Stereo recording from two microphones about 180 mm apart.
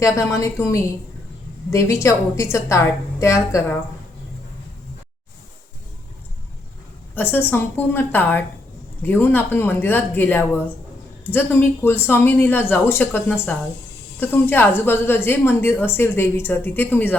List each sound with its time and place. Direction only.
0.0 s a woman's voice: 15° left (ahead or behind)
7.2 s a woman's voice: 10° left (ahead or behind)